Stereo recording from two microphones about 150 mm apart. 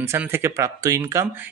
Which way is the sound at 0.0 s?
15° right (ahead or behind).